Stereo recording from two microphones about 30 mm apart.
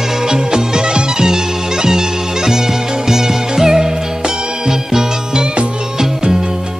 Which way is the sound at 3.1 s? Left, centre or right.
Centre.